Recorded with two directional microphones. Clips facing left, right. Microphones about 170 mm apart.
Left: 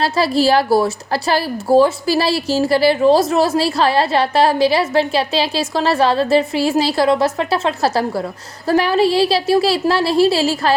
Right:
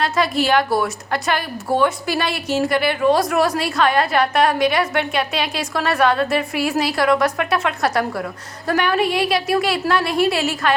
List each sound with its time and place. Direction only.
0.0 s speech: 35° left (ahead or behind)